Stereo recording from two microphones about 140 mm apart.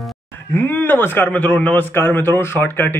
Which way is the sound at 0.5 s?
15° left (ahead or behind).